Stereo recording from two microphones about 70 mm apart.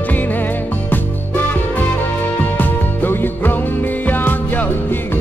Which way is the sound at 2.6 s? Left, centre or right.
Left.